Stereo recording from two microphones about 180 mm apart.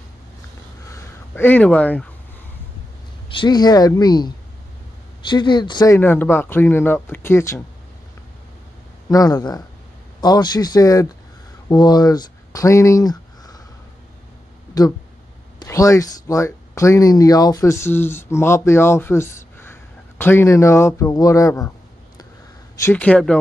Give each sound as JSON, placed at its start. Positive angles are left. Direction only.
{"t": 0.8, "sound": "a sound", "side_deg": 15}
{"t": 3.3, "sound": "speech", "side_deg": 25}
{"t": 5.3, "sound": "speech", "side_deg": 25}
{"t": 5.9, "sound": "speech", "side_deg": 10}
{"t": 9.1, "sound": "speech", "side_deg": 20}
{"t": 14.7, "sound": "speech", "side_deg": 20}